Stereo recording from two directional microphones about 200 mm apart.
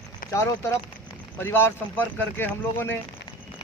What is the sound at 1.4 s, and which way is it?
Speech, 10° left (ahead or behind).